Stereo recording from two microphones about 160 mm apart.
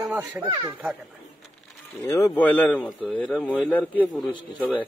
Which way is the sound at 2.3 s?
10° left (ahead or behind).